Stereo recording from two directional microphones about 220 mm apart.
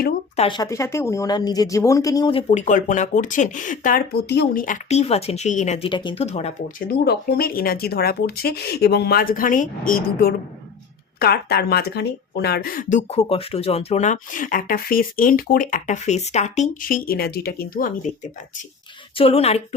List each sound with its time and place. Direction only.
0.3 s speech: 20° left (ahead or behind); by 17.9 s 40° left (ahead or behind)
19.1 s speech: 25° left (ahead or behind)